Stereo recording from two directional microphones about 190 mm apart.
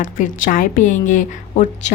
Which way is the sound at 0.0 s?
45° left (ahead or behind).